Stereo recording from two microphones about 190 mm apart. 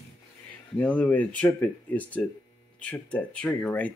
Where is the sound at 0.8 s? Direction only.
5° left (ahead or behind).